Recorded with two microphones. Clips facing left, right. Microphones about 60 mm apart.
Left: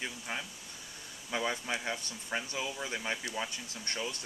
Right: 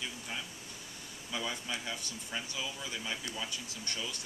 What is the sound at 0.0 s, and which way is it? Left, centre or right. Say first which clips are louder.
Speech: left 2 dB; left.